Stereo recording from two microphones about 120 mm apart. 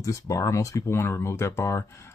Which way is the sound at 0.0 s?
25° left (ahead or behind).